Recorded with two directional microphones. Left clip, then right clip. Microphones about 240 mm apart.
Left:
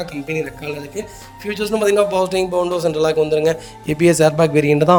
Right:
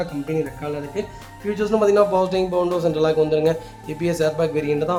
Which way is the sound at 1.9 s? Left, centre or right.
Left.